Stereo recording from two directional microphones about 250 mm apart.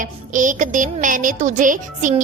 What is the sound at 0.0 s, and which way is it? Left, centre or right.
A woman's voice, right.